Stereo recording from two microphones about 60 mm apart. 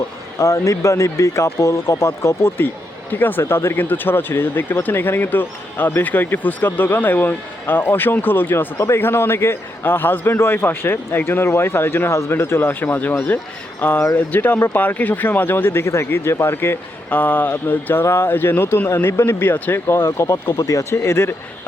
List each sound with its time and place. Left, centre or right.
0.3 s speech: left
3.1 s speech: left
8.5 s speech: left
17.1 s speech: left
18.0 s speech: left
20.1 s speech: left
20.6 s speech: left
20.9 s speech: left